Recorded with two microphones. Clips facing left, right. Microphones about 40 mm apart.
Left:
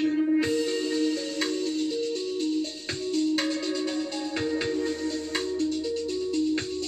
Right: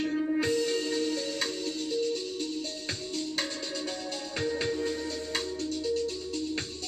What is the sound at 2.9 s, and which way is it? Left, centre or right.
Music, centre.